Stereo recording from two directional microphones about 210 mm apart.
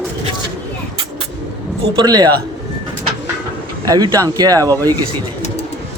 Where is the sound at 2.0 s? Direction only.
20° right (ahead or behind).